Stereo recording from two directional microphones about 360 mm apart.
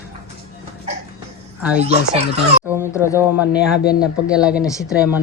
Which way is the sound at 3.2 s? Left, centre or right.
Centre.